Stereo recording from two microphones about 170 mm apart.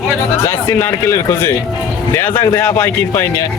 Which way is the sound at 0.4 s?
15° left (ahead or behind).